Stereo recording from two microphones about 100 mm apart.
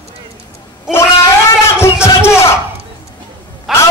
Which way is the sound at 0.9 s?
30° left (ahead or behind).